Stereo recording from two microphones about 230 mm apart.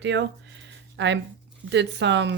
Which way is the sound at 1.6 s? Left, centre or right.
Right.